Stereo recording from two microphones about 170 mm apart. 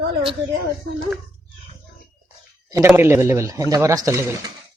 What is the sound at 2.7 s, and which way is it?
Speech, 10° right (ahead or behind).